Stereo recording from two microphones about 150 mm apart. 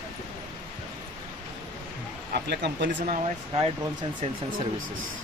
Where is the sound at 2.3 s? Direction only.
75° right (ahead or behind).